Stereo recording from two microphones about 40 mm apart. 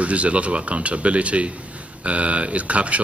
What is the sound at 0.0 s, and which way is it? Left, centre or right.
Speech, right.